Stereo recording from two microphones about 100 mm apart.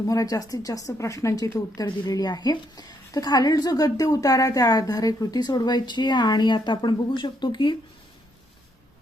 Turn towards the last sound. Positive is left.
turn(degrees=50)  # may be behind; listen again after turning